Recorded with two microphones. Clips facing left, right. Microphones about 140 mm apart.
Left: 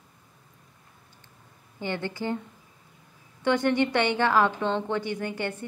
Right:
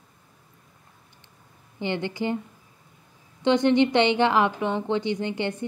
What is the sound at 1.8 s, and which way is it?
Speech, 20° right (ahead or behind).